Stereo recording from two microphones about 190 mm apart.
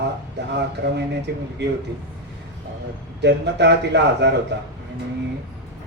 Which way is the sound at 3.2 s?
65° right (ahead or behind).